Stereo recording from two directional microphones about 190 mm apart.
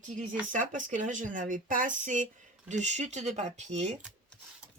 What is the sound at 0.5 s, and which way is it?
Speech, 45° right (ahead or behind).